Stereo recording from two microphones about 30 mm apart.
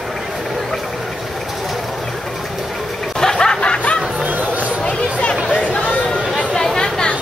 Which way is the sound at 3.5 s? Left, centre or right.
Left.